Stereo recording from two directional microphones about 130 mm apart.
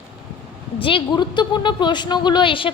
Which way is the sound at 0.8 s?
40° left (ahead or behind).